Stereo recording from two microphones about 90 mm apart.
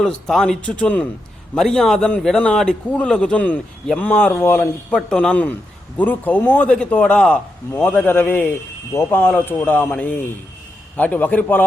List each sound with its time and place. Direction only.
0.0 s a man's voice: 5° left (ahead or behind); by 4.9 s 20° left (ahead or behind)
5.0 s a man's voice: 10° left (ahead or behind)
7.7 s speech: 20° left (ahead or behind)